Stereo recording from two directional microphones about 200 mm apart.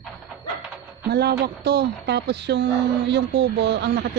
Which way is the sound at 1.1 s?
55° right (ahead or behind).